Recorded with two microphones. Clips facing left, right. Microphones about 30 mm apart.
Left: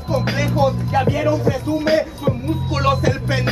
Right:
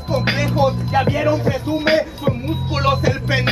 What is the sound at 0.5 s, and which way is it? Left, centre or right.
Music, centre.